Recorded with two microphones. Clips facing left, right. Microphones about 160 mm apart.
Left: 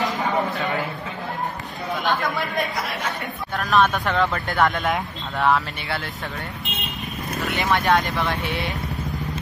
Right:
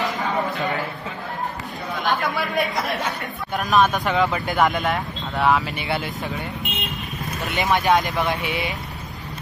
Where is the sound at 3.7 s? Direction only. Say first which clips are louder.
Right 1 dB; centre (ahead or behind).